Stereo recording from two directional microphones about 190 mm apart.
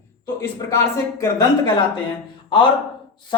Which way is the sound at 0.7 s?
15° left (ahead or behind).